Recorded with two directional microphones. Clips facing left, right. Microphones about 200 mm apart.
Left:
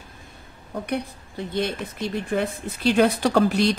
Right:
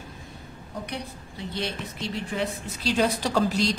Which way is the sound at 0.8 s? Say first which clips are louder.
Left 7 dB; 55° left (ahead or behind).